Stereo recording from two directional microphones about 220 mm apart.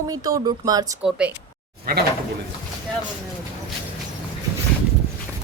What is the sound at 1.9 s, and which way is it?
Speech, 45° right (ahead or behind).